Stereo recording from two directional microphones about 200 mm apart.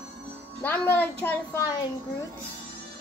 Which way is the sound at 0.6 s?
10° left (ahead or behind).